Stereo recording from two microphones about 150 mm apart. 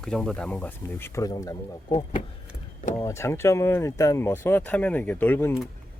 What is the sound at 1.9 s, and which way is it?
Speech, 35° left (ahead or behind).